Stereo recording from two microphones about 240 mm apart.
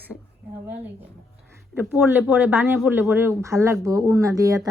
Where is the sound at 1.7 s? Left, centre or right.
Centre.